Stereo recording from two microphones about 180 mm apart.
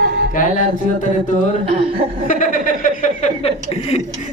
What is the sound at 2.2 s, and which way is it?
Speech, 45° left (ahead or behind).